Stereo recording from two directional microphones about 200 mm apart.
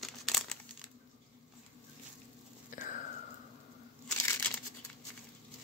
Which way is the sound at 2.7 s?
40° left (ahead or behind).